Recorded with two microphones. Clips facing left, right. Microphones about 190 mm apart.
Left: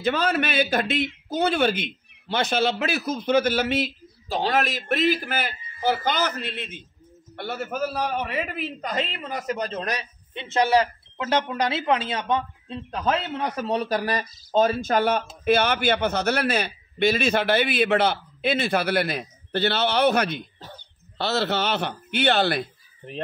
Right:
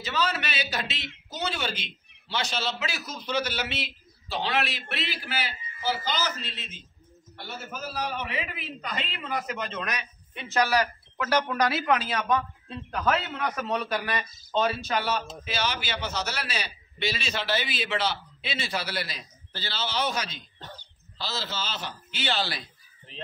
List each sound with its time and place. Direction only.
0.0 s a man's voice: 55° left (ahead or behind)